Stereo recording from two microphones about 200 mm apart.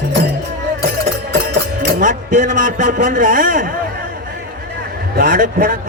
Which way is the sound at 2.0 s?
40° right (ahead or behind).